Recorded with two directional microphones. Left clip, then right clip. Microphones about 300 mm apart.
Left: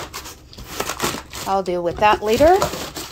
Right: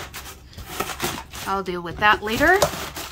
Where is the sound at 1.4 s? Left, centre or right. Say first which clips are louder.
Left 6 dB; centre.